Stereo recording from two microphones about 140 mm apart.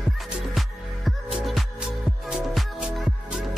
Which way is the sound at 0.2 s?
Centre (ahead or behind).